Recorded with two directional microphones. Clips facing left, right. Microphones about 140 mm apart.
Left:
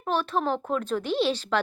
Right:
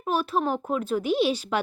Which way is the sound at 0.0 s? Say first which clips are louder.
Right 1 dB; 10° right (ahead or behind).